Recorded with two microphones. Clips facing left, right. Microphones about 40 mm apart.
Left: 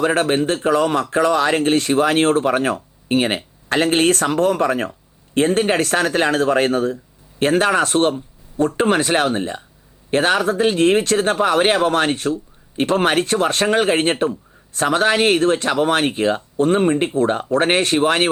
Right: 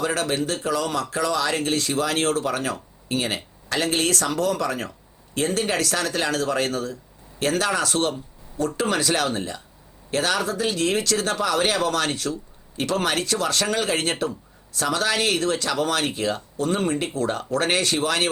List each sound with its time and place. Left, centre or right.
0.0 s speech: left